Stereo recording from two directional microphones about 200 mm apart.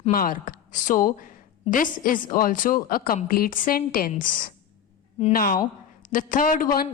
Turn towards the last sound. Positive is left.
turn(degrees=45)  # may be behind; listen again after turning